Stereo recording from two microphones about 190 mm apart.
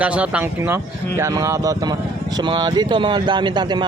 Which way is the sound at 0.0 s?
5° right (ahead or behind).